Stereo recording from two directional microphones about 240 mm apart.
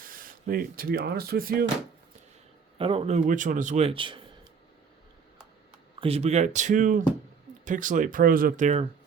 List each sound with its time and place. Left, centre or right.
0.0 s speech: right
2.7 s a man's voice: right
6.0 s a man's voice: right